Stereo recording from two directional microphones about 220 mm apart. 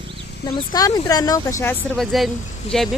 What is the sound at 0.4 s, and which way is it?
Speech, 15° left (ahead or behind).